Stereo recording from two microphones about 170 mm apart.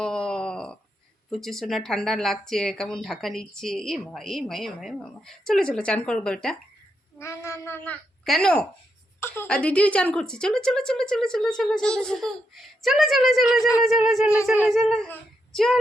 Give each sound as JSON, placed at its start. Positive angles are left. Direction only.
{"t": 0.0, "sound": "wail", "side_deg": 5}
{"t": 1.3, "sound": "speech", "side_deg": 0}
{"t": 7.2, "sound": "speech", "side_deg": 15}
{"t": 8.2, "sound": "speech", "side_deg": 5}